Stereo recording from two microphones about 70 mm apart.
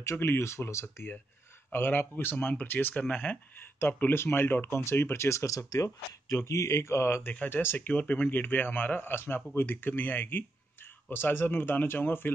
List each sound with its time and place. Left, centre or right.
0.0 s speech: left
3.8 s speech: left